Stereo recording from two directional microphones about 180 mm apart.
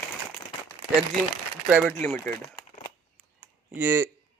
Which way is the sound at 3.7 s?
15° right (ahead or behind).